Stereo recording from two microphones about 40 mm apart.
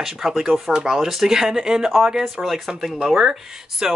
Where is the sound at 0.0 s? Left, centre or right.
Centre.